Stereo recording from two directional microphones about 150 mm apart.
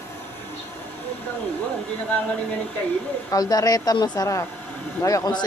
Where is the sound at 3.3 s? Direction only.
25° left (ahead or behind).